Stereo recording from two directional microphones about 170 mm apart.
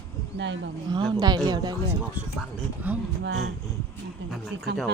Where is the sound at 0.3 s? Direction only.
90° right.